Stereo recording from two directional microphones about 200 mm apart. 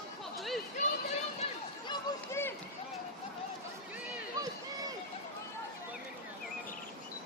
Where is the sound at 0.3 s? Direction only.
Centre (ahead or behind).